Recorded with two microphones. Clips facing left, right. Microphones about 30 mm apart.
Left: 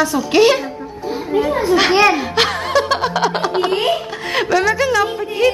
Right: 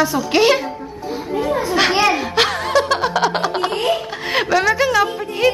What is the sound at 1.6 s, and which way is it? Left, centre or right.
Speech, centre.